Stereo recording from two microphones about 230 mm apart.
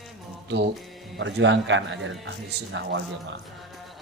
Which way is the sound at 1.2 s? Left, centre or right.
Right.